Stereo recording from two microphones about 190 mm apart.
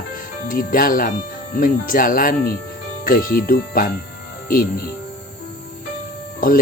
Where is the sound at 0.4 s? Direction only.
50° left (ahead or behind).